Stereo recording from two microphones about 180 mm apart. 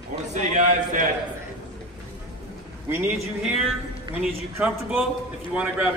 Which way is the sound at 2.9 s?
10° right (ahead or behind).